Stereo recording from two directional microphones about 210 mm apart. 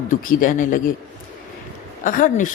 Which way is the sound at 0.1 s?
40° left (ahead or behind).